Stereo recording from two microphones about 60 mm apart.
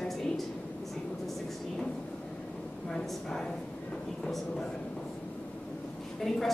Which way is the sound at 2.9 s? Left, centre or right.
Centre.